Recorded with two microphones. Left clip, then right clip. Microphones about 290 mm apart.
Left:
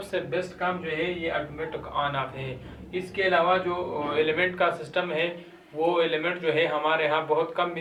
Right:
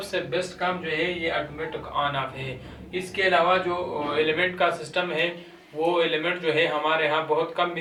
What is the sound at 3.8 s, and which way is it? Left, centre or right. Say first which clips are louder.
Speech: right 1 dB; left.